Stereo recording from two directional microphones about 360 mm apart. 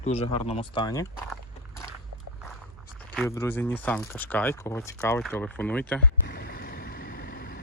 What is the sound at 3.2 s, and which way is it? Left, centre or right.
Speech, centre.